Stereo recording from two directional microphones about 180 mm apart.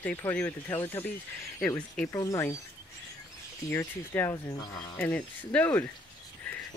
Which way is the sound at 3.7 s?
10° left (ahead or behind).